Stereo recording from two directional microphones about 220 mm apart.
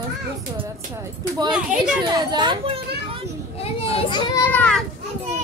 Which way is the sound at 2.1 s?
20° right (ahead or behind).